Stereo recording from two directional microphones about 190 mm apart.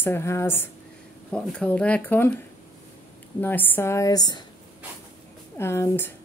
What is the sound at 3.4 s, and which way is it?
A woman's voice, 10° left (ahead or behind).